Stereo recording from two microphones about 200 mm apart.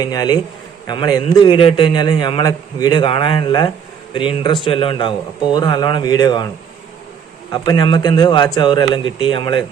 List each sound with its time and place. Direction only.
0.0 s a man's voice: 20° left (ahead or behind)
7.5 s a man's voice: 20° left (ahead or behind)